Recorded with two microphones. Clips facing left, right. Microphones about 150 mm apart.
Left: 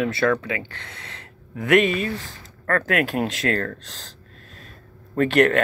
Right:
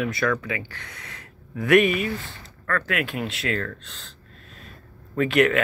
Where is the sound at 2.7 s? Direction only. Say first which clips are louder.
Left 5 dB; 55° left (ahead or behind); by 4.1 s 35° left (ahead or behind).